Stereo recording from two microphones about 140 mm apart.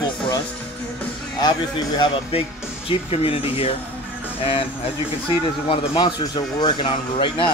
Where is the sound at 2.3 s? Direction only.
45° left (ahead or behind).